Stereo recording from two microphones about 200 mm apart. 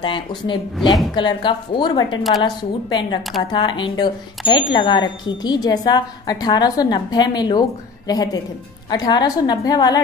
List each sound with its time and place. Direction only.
0.0 s a woman's voice: 25° left (ahead or behind)